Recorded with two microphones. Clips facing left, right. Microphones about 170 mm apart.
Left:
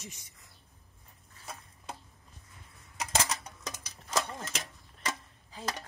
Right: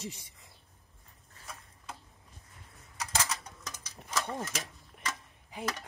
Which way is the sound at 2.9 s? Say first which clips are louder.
Left 2 dB; 20° left (ahead or behind).